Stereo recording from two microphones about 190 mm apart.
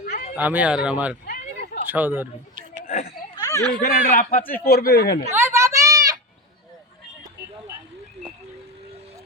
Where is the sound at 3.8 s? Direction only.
50° left (ahead or behind).